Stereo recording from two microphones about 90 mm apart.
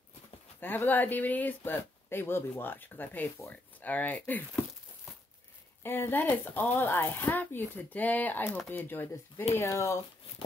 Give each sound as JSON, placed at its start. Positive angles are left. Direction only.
{"t": 0.6, "sound": "speech", "side_deg": 20}
{"t": 5.8, "sound": "speech", "side_deg": 25}